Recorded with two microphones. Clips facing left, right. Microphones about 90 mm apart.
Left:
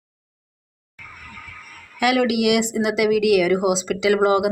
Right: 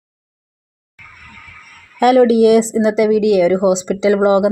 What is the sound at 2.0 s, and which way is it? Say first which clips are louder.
A woman's voice: right 9 dB; 35° right (ahead or behind).